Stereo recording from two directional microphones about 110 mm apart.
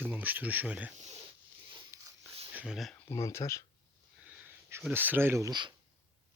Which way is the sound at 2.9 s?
20° left (ahead or behind).